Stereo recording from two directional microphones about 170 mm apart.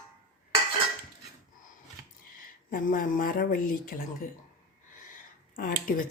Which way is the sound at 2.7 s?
55° left (ahead or behind).